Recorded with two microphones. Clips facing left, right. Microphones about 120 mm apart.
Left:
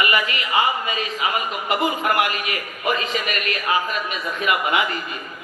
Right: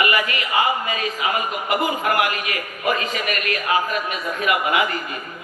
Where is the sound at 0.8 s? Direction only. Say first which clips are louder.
Right 1 dB; 25° left (ahead or behind).